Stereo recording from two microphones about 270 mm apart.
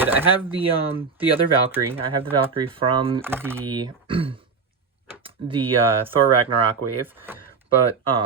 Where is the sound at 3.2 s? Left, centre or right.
Centre.